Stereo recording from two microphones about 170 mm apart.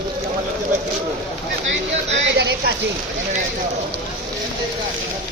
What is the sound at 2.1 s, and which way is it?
Speech, 80° right.